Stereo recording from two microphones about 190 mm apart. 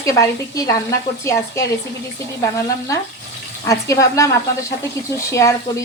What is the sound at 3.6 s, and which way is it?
Speech, 15° left (ahead or behind).